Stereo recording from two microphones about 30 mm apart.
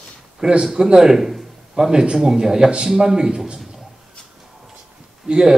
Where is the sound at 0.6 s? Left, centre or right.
Centre.